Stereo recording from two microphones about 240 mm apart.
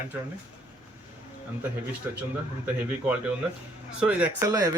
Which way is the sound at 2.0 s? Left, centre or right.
Centre.